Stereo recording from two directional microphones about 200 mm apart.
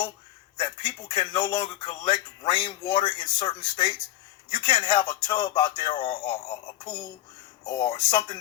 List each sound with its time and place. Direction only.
0.6 s speech: 20° left (ahead or behind)